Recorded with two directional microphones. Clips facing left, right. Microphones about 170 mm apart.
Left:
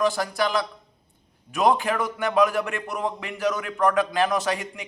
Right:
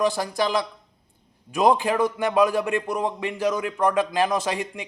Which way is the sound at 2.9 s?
25° right (ahead or behind).